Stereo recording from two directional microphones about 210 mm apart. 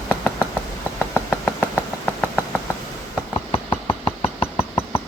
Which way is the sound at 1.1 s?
5° left (ahead or behind).